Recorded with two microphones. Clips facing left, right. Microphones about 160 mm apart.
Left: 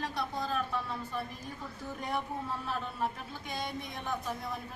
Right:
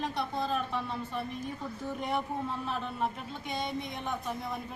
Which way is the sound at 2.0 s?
25° right (ahead or behind).